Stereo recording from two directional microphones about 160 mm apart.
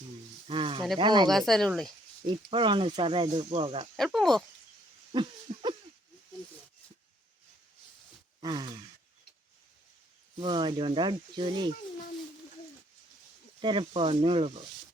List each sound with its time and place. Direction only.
0.4 s speech: 35° right (ahead or behind)
1.3 s speech: centre (ahead or behind)
2.2 s speech: 30° right (ahead or behind)
3.9 s speech: centre (ahead or behind)
5.5 s a sound: 40° right (ahead or behind)
8.4 s sigh: 25° right (ahead or behind)
10.3 s speech: 30° right (ahead or behind)
13.6 s speech: 30° right (ahead or behind)